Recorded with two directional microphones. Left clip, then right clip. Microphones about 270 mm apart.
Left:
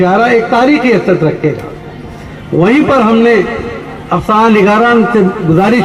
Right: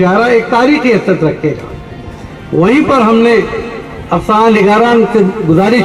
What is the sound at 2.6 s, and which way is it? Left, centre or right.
A man's voice, left.